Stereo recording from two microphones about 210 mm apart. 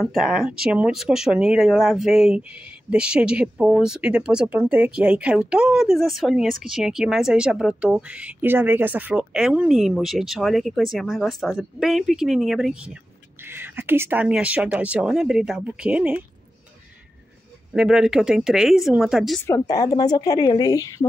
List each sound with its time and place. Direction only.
0.0 s speech: centre (ahead or behind)
17.7 s speech: 5° right (ahead or behind)
19.4 s a woman's voice: 15° left (ahead or behind)